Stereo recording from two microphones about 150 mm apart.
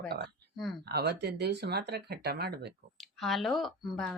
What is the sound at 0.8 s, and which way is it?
Speech, 90° right.